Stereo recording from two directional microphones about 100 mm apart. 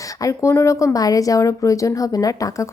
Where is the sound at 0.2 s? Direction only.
30° left (ahead or behind).